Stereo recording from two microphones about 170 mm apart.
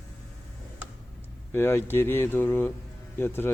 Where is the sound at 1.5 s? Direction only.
15° left (ahead or behind).